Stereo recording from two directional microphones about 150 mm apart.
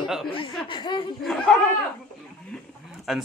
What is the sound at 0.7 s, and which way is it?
Speech, 30° left (ahead or behind).